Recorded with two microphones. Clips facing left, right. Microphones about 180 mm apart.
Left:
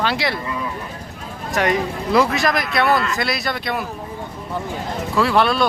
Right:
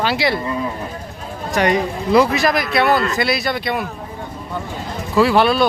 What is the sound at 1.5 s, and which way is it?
Speech, centre (ahead or behind).